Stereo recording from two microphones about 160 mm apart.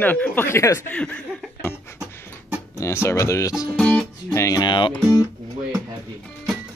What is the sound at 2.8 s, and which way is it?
Speech, 15° left (ahead or behind).